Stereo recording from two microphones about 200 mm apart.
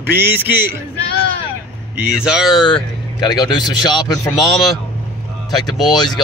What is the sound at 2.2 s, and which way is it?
Speech, centre (ahead or behind).